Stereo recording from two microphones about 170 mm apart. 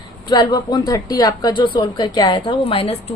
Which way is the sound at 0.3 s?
25° left (ahead or behind).